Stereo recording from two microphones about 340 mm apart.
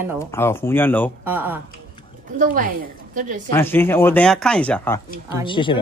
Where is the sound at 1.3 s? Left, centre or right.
Centre.